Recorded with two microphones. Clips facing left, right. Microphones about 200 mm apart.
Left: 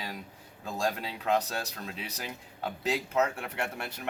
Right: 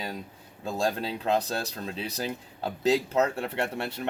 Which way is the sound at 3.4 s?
30° right (ahead or behind).